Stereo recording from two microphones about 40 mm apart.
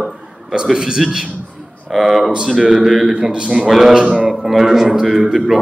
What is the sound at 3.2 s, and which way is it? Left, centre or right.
Speech, centre.